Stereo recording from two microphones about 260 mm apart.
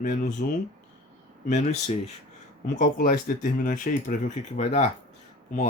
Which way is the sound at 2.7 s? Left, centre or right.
Left.